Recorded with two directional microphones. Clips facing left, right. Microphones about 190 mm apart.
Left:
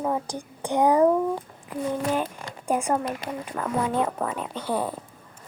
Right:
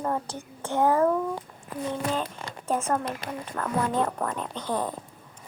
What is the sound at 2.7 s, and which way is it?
A child's voice, 15° left (ahead or behind).